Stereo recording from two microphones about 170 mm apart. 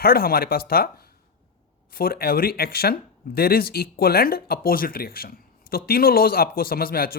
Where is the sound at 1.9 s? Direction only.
60° left (ahead or behind).